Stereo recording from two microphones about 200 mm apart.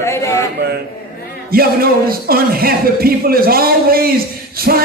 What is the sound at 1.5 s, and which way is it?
Speech, 50° right (ahead or behind).